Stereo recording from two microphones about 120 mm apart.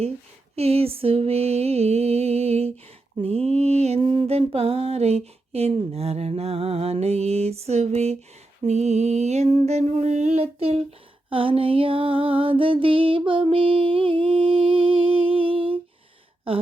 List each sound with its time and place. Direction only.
0.5 s mantra: 55° right (ahead or behind)
11.3 s music: 50° right (ahead or behind)